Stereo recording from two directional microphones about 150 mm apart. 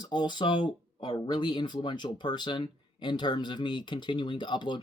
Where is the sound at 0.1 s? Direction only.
30° left (ahead or behind).